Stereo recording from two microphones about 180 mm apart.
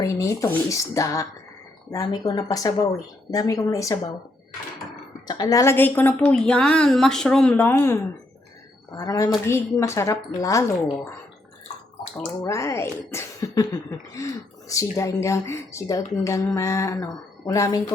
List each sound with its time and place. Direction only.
0.0 s speech: 15° left (ahead or behind)
5.3 s speech: 20° left (ahead or behind)
12.1 s speech: 5° left (ahead or behind)
12.5 s speech: 15° left (ahead or behind)
14.7 s speech: 15° left (ahead or behind)